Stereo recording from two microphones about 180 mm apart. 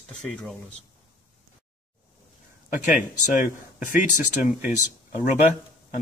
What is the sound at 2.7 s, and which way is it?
Speech, 45° left (ahead or behind).